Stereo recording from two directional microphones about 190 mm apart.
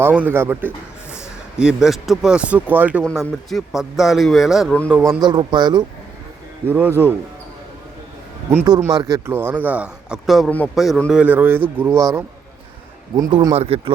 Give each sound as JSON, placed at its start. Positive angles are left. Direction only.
{"t": 0.0, "sound": "a man's voice", "side_deg": -10}
{"t": 3.0, "sound": "a man's voice", "side_deg": 0}
{"t": 4.9, "sound": "a man's voice", "side_deg": -10}
{"t": 5.2, "sound": "speech", "side_deg": -25}
{"t": 6.7, "sound": "a man's voice", "side_deg": -10}
{"t": 8.8, "sound": "a man's voice", "side_deg": -20}
{"t": 13.5, "sound": "speech", "side_deg": -30}